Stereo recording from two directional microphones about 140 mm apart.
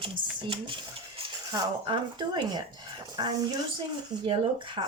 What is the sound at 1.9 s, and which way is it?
Speech, 30° right (ahead or behind).